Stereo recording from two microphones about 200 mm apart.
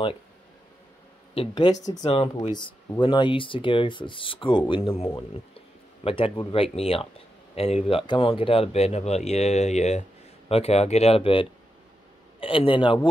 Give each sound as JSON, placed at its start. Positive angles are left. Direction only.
{"t": 1.3, "sound": "speech", "side_deg": 25}